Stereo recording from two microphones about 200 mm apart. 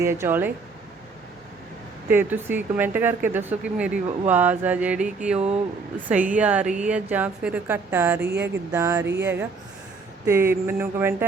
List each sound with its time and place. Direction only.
0.0 s speech: 10° right (ahead or behind)
2.0 s speech: 10° right (ahead or behind)
5.4 s speech: 35° right (ahead or behind)
6.1 s speech: 5° right (ahead or behind)
8.2 s speech: 55° right (ahead or behind)
8.7 s speech: 10° right (ahead or behind)